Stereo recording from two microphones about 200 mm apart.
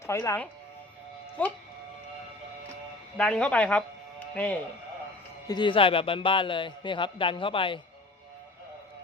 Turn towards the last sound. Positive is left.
turn(degrees=25)  # may be behind; listen again after turning